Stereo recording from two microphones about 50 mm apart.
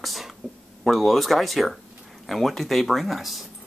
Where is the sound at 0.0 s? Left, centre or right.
Centre.